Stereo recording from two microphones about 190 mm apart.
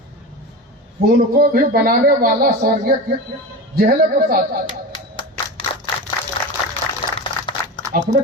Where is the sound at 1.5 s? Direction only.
50° right (ahead or behind).